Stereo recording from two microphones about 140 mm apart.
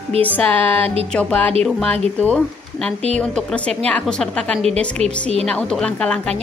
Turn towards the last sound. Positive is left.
turn(degrees=5)  # may be behind; listen again after turning